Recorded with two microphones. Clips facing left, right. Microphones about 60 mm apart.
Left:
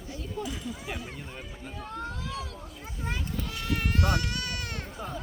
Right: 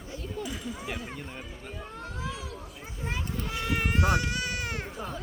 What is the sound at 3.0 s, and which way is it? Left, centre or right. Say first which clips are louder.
Baby cry: right 1 dB; right.